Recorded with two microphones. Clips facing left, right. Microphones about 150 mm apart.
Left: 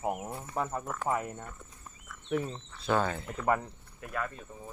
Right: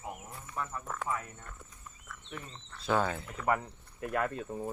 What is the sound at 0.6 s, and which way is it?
Speech, 55° left (ahead or behind).